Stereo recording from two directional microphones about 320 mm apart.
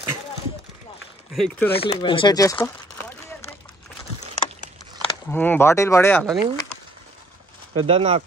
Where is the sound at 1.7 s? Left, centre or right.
Centre.